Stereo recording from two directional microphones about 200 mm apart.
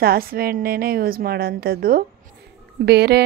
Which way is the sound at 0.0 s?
50° right (ahead or behind).